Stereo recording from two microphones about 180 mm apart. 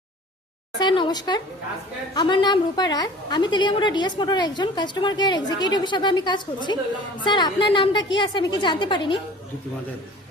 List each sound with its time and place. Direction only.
0.8 s a woman's voice: 25° left (ahead or behind)